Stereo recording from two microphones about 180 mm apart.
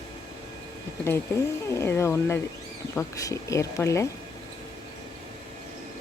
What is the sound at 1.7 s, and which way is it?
Speech, 15° left (ahead or behind).